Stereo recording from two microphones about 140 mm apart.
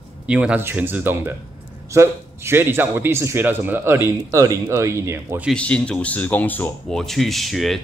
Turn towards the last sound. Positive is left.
turn(degrees=0)  # may be behind; listen again after turning